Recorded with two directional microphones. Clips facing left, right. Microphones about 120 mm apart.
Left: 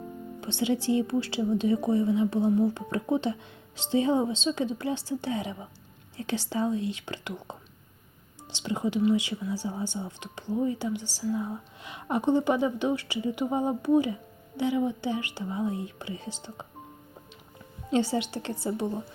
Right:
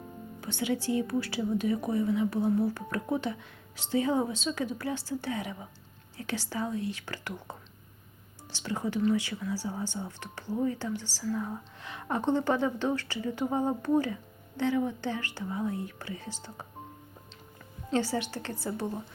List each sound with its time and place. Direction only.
0.4 s a woman's voice: 25° left (ahead or behind)
17.9 s speech: 20° left (ahead or behind)